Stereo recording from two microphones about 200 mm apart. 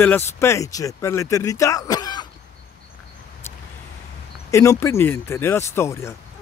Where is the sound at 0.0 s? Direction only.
10° left (ahead or behind).